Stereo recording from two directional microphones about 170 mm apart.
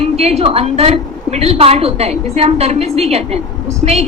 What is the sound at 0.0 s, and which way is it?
A woman's voice, 40° right (ahead or behind).